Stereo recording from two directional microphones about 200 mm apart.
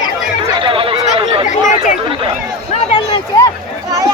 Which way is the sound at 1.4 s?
40° left (ahead or behind).